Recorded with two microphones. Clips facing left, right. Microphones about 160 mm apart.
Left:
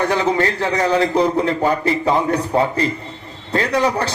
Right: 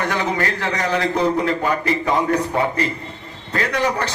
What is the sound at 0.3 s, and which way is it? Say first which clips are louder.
A man's voice: left 4 dB; 30° left (ahead or behind).